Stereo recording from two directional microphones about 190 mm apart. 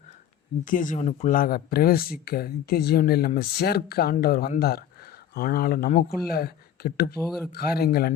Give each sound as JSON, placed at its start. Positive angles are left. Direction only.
{"t": 0.6, "sound": "speech", "side_deg": 45}
{"t": 7.3, "sound": "speech", "side_deg": 0}
{"t": 7.5, "sound": "speech", "side_deg": 55}